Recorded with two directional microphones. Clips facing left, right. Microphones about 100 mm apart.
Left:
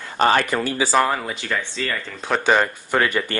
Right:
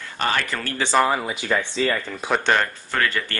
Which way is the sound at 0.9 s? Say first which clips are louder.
Right 2 dB; 5° right (ahead or behind).